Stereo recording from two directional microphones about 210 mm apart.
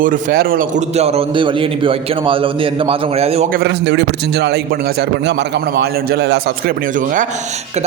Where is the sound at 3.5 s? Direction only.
50° right (ahead or behind).